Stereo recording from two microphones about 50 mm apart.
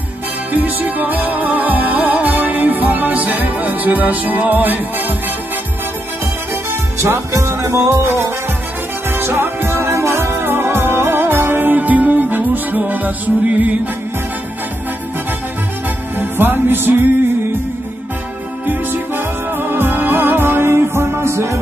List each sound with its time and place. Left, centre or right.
0.5 s music: right
6.5 s music: right
16.2 s music: right
18.7 s music: right